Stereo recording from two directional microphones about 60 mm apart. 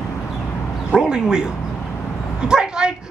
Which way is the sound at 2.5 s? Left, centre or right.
Centre.